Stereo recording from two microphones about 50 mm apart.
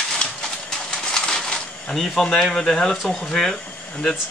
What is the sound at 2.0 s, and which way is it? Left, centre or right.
Speech, centre.